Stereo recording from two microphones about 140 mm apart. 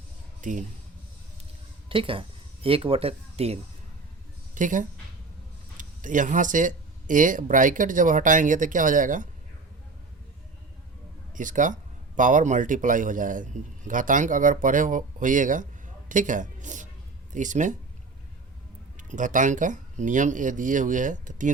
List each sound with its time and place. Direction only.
0.4 s speech: 65° right (ahead or behind)
1.9 s speech: 40° right (ahead or behind)
4.5 s speech: 65° right (ahead or behind)
11.3 s a woman's voice: 65° right (ahead or behind)
18.9 s speech: 65° right (ahead or behind)